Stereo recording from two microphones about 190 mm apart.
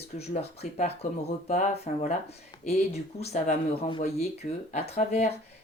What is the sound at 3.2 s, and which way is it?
Speech, 35° left (ahead or behind).